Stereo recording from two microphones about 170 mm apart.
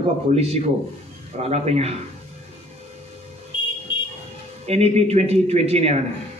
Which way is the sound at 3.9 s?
30° left (ahead or behind).